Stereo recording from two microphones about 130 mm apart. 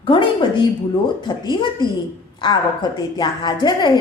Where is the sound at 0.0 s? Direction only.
40° left (ahead or behind).